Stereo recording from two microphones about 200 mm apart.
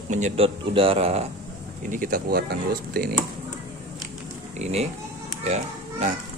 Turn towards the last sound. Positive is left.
turn(degrees=-35)  # may be behind; listen again after turning